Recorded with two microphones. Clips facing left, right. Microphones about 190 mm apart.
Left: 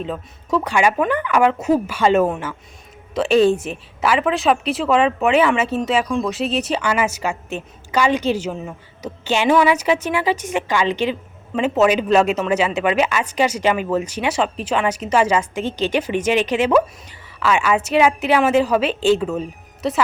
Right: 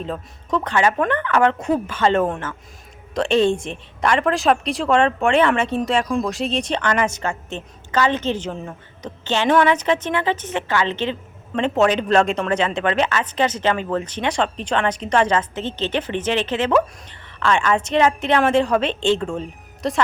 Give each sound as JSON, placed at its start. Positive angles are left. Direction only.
{"t": 0.0, "sound": "speech", "side_deg": 5}